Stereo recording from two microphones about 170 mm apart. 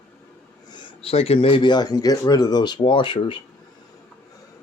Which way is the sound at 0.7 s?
30° left (ahead or behind).